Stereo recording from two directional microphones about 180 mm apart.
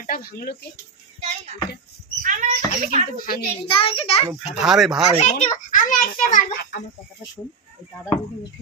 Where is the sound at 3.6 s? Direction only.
30° left (ahead or behind).